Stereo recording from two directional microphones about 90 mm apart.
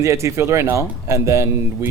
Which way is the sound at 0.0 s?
35° right (ahead or behind).